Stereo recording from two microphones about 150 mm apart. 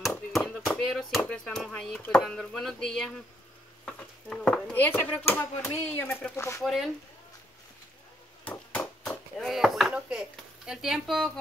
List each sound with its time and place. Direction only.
0.3 s chop: centre (ahead or behind)
1.2 s speech: 5° left (ahead or behind)
6.6 s speech: centre (ahead or behind)
8.5 s chop: 10° left (ahead or behind)
9.4 s speech: centre (ahead or behind)